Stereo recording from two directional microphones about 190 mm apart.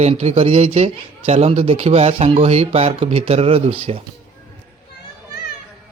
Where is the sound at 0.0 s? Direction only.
35° right (ahead or behind).